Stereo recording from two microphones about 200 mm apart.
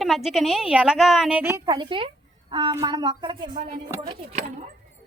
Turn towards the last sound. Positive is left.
turn(degrees=-30)  # may be behind; listen again after turning